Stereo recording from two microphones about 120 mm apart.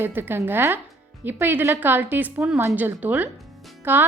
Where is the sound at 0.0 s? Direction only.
20° right (ahead or behind).